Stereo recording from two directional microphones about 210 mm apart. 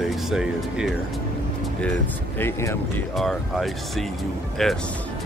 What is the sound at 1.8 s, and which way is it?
Speech, 10° left (ahead or behind).